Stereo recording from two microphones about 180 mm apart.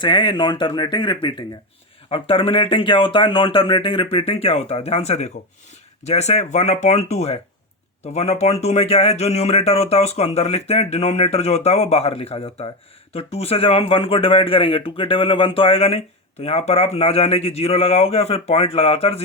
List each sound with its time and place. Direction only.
0.0 s speech: 25° left (ahead or behind)